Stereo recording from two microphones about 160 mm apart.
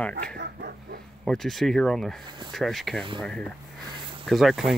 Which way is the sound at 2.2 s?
30° right (ahead or behind).